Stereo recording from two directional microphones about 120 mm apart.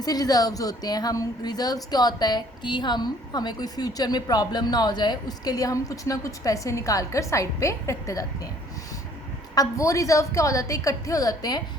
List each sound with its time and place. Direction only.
0.0 s speech: 30° left (ahead or behind)
9.6 s a woman's voice: 25° left (ahead or behind)